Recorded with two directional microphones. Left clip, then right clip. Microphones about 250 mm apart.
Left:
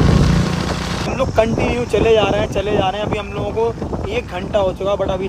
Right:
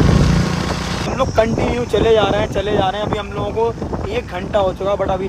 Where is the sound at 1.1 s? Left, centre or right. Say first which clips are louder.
Even; centre.